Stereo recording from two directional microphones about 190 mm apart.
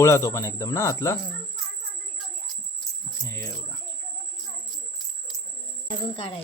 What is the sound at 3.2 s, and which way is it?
Speech, 15° left (ahead or behind).